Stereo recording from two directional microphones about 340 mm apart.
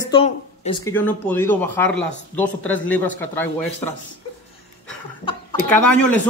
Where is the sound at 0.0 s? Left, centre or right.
Centre.